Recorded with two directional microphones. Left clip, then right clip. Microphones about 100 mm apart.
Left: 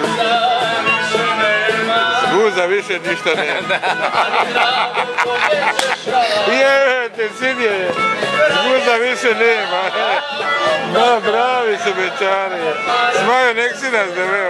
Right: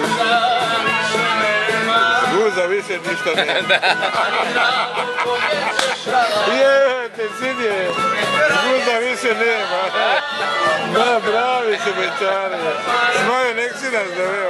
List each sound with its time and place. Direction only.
1.4 s music: 5° right (ahead or behind)
2.3 s music: 15° left (ahead or behind)
6.5 s speech: 15° left (ahead or behind)
8.8 s speech: 20° left (ahead or behind)
11.1 s speech: 20° left (ahead or behind)
13.2 s speech: 15° left (ahead or behind)